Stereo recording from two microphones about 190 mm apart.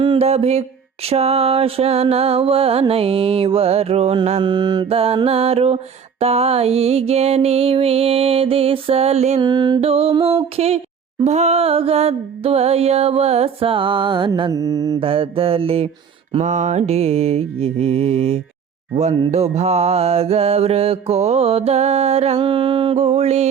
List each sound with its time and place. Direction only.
0.0 s music: 30° right (ahead or behind)
9.4 s a sound: 20° right (ahead or behind)
11.2 s music: 35° right (ahead or behind)